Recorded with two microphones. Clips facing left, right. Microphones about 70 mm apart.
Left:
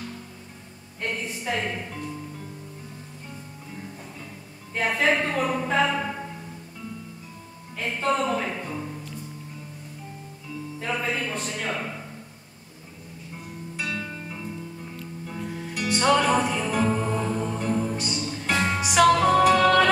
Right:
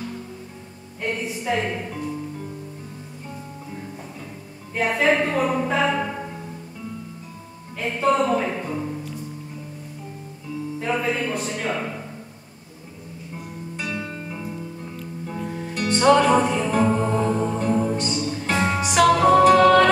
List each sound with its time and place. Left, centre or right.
1.0 s speech: centre
4.7 s a woman's voice: centre
7.8 s speech: centre
10.8 s speech: centre
13.7 s music: centre
14.0 s music: centre
17.9 s music: centre